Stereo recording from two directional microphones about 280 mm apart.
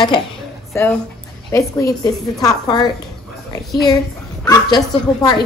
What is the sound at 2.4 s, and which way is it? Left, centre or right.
Speech, centre.